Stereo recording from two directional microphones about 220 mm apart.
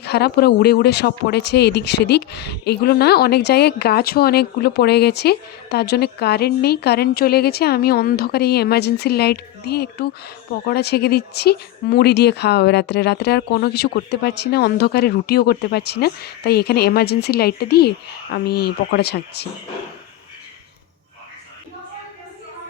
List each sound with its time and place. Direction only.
0.0 s speech: 50° left (ahead or behind)